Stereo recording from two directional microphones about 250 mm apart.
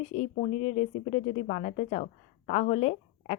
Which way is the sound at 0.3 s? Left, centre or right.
Left.